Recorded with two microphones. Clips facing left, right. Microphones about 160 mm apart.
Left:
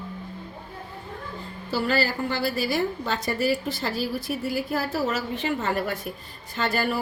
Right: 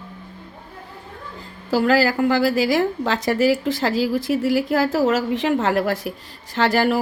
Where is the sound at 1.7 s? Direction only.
90° right.